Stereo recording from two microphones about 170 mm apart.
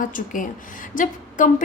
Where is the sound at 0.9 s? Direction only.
50° left (ahead or behind).